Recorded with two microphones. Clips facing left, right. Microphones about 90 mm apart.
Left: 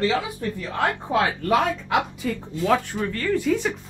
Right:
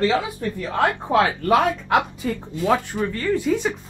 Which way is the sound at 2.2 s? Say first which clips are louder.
Right 1 dB; 30° right (ahead or behind).